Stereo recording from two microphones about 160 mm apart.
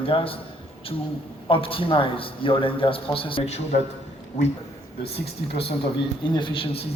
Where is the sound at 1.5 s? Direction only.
35° left (ahead or behind).